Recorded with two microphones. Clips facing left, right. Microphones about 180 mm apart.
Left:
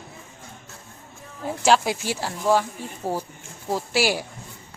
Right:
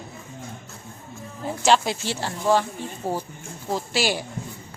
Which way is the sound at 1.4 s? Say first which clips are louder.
Even; 5° left (ahead or behind).